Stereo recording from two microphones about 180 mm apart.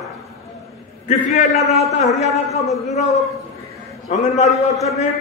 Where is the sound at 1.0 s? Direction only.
40° left (ahead or behind).